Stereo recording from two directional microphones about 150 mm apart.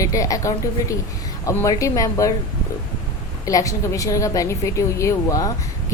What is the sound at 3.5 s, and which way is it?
A woman's voice, 20° left (ahead or behind).